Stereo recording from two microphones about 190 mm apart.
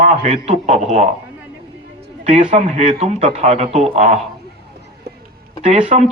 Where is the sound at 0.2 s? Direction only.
35° right (ahead or behind).